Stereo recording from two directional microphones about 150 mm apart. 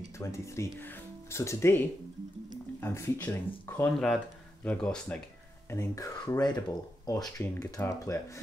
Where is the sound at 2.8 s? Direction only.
15° left (ahead or behind).